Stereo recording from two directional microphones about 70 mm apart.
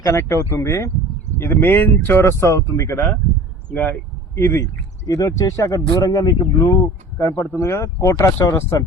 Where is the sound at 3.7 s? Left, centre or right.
Left.